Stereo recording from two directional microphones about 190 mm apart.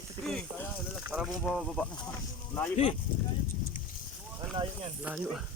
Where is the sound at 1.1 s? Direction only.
5° right (ahead or behind).